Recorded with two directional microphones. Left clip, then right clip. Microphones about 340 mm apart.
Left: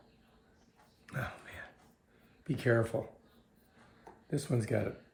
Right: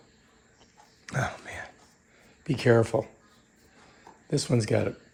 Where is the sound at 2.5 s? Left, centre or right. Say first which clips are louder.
Right 9 dB; centre.